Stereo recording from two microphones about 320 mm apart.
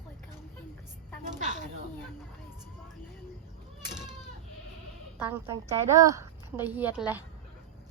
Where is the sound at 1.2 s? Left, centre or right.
Right.